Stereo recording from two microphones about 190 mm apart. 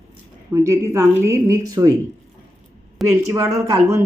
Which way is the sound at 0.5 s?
15° right (ahead or behind).